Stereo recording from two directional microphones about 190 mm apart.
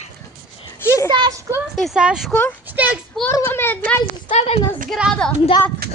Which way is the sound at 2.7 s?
10° right (ahead or behind).